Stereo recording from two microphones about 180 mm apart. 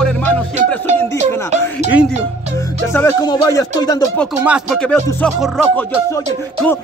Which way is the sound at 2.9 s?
15° left (ahead or behind).